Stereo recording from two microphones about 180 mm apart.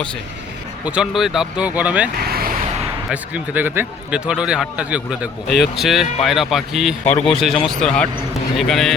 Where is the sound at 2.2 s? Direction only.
55° right (ahead or behind).